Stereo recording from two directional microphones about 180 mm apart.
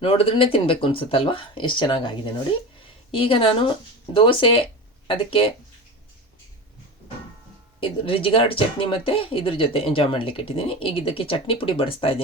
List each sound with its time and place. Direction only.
0.0 s speech: 30° left (ahead or behind)
7.8 s speech: 30° left (ahead or behind)